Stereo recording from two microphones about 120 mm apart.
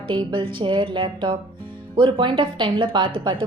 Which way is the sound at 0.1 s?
40° right (ahead or behind).